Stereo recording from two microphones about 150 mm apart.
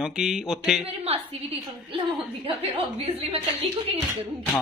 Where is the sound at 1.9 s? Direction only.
35° right (ahead or behind).